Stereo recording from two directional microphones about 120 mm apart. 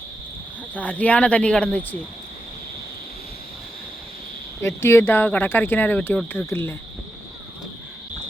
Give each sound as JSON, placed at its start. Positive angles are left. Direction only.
{"t": 0.7, "sound": "speech", "side_deg": 15}
{"t": 4.6, "sound": "speech", "side_deg": 20}